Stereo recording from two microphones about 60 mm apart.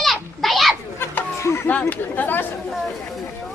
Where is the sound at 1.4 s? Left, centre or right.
Left.